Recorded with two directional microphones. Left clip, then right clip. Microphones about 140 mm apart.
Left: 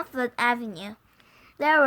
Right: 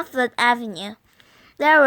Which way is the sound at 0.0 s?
40° right (ahead or behind).